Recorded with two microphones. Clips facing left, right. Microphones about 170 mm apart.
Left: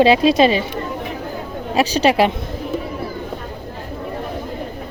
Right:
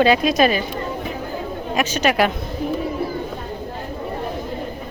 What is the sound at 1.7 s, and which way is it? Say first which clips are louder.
Speech: left 4 dB; 30° left (ahead or behind).